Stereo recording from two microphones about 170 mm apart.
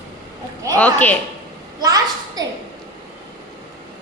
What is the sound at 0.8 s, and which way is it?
Speech, 10° left (ahead or behind).